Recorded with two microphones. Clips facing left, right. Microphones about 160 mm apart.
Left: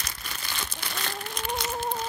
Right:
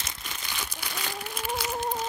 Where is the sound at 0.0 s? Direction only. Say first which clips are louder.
Left 1 dB; 20° right (ahead or behind).